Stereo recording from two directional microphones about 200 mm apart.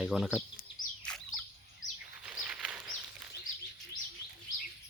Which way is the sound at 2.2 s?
5° right (ahead or behind).